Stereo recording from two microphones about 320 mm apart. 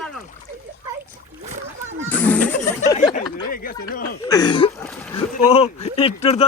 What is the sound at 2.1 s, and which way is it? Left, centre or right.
Speech, centre.